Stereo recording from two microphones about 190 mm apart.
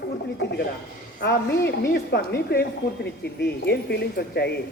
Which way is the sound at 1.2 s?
60° left (ahead or behind).